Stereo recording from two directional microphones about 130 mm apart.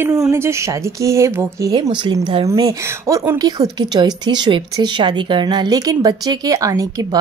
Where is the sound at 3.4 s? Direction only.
30° right (ahead or behind).